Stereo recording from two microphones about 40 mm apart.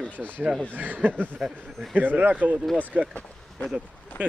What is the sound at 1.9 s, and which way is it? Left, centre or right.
Speech, right.